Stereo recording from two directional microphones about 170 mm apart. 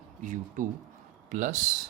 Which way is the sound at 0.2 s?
50° right (ahead or behind).